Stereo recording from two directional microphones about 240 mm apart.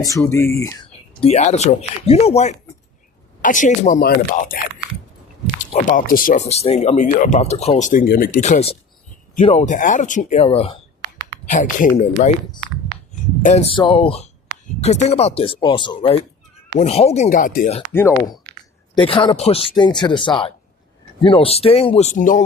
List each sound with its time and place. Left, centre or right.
0.0 s speech: centre
1.2 s speech: left
5.5 s speech: left
13.4 s speech: left
17.9 s speech: centre
18.9 s speech: left